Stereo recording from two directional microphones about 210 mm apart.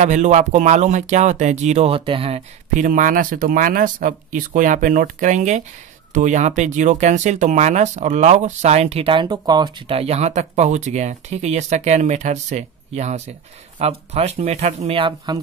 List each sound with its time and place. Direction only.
0.0 s speech: 35° right (ahead or behind)